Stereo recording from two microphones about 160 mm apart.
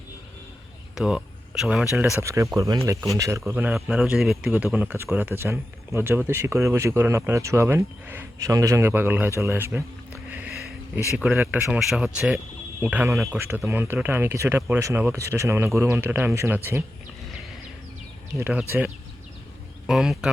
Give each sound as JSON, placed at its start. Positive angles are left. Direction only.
{"t": 0.9, "sound": "speech", "side_deg": -5}
{"t": 2.2, "sound": "speech", "side_deg": -20}
{"t": 18.3, "sound": "speech", "side_deg": -15}
{"t": 19.9, "sound": "speech", "side_deg": -5}